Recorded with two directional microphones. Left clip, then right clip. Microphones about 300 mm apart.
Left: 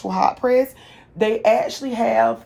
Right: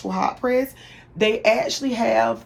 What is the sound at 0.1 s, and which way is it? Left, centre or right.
Speech, centre.